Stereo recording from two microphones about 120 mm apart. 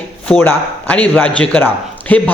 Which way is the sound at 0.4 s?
10° left (ahead or behind).